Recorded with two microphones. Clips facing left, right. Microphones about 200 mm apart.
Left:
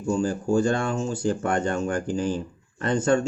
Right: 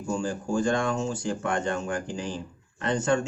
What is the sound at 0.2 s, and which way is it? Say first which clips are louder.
Speech: left 6 dB; 40° left (ahead or behind).